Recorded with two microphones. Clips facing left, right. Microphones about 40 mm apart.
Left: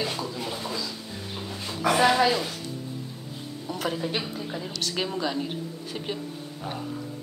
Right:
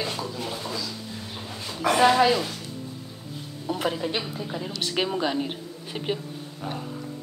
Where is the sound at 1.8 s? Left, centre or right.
Centre.